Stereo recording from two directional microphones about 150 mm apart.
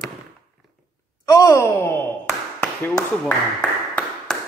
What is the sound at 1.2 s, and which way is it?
Sigh, 20° left (ahead or behind).